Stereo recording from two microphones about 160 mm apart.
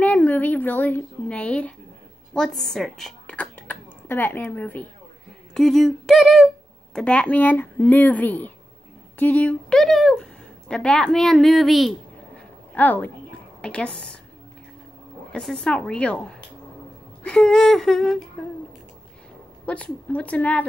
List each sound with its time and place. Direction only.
0.0 s a woman's voice: 10° left (ahead or behind)
15.3 s a woman's voice: centre (ahead or behind)
19.6 s speech: 10° left (ahead or behind)